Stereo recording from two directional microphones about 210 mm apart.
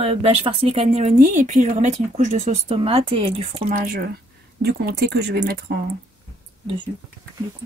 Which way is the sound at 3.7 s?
45° right (ahead or behind).